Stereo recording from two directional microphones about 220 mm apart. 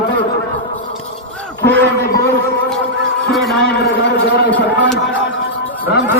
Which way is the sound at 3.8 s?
50° left (ahead or behind).